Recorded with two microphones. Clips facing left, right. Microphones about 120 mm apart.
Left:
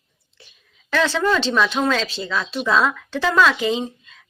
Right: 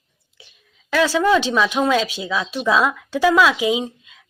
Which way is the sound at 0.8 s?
5° right (ahead or behind).